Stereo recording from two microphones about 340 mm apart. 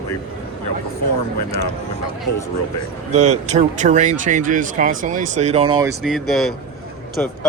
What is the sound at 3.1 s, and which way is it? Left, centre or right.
A man's voice, centre.